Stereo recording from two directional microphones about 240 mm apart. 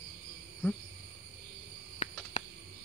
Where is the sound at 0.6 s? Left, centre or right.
Centre.